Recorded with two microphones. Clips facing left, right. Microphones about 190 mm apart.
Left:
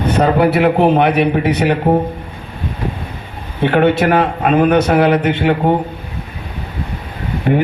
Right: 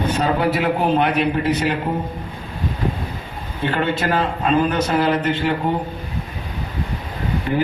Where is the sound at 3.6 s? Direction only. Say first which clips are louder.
Left 9 dB; 65° left (ahead or behind).